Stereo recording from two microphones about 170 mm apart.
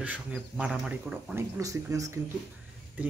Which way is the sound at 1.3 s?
20° right (ahead or behind).